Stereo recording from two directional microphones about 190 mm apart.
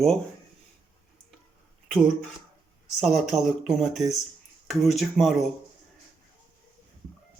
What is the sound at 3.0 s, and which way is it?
Speech, centre (ahead or behind).